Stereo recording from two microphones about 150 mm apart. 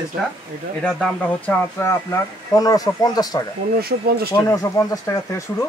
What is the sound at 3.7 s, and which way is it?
Speech, 90° right.